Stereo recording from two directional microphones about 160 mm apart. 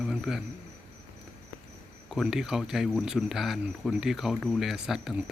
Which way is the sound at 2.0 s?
Centre (ahead or behind).